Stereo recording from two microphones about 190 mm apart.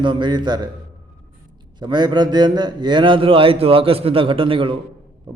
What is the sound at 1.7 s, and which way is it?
A man's voice, 25° right (ahead or behind).